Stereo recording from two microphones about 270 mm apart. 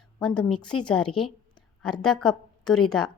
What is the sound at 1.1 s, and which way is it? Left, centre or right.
Speech, centre.